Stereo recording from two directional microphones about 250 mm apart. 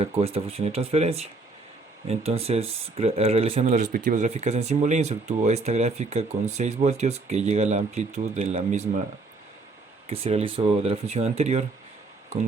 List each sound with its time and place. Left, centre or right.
0.0 s speech: right
10.1 s speech: right